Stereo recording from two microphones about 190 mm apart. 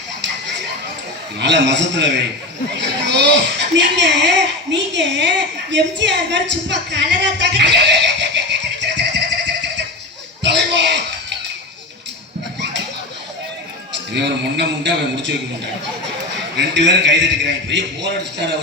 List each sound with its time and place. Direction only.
1.4 s a man's voice: 65° right (ahead or behind)
6.7 s neigh: 70° right (ahead or behind)
10.4 s a sound: 65° right (ahead or behind)
14.1 s speech: 65° right (ahead or behind)
16.6 s a man's voice: 70° right (ahead or behind)